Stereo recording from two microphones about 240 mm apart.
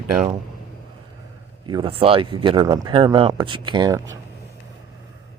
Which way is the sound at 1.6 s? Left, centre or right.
Right.